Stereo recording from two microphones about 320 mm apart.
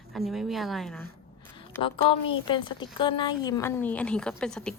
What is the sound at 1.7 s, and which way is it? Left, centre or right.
A woman's voice, centre.